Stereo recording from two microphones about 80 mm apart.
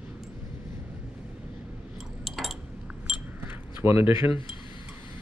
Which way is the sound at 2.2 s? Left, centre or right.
Centre.